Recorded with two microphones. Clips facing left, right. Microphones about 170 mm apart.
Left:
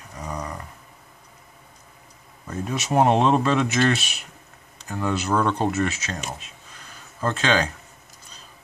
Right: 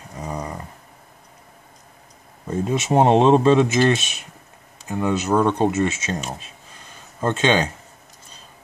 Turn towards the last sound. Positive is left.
turn(degrees=-20)  # may be behind; listen again after turning